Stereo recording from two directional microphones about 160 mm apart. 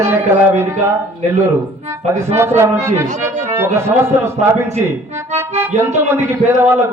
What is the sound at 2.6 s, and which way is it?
Speech, 15° right (ahead or behind).